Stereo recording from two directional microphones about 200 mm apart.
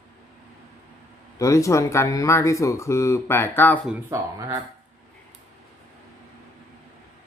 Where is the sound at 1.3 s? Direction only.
15° left (ahead or behind).